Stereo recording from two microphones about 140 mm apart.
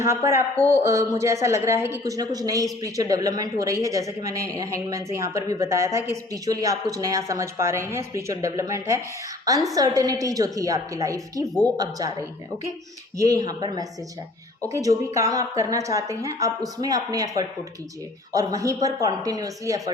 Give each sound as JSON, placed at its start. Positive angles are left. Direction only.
{"t": 0.3, "sound": "a woman's voice", "side_deg": -20}
{"t": 13.1, "sound": "a woman's voice", "side_deg": -25}